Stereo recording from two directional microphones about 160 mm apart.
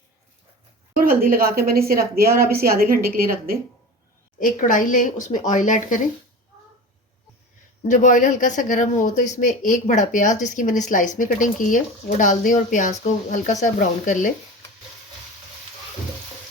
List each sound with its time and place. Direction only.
0.9 s a woman's voice: 65° right (ahead or behind)
4.4 s speech: 55° left (ahead or behind)
7.8 s speech: 55° left (ahead or behind)